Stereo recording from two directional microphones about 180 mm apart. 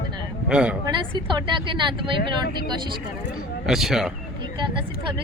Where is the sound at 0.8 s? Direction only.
25° right (ahead or behind).